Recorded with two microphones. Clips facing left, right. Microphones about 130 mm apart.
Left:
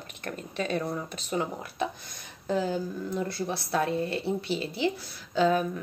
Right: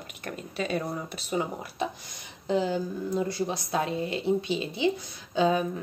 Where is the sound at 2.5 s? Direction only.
15° right (ahead or behind).